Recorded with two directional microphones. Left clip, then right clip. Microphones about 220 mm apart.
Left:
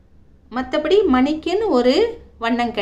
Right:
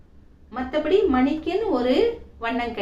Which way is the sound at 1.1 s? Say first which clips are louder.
Left 4 dB; 50° left (ahead or behind).